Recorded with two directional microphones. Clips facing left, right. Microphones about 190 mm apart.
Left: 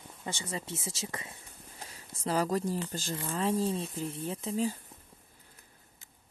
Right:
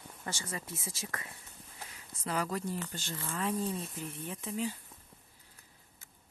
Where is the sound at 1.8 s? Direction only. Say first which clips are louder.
Left 3 dB; 35° left (ahead or behind).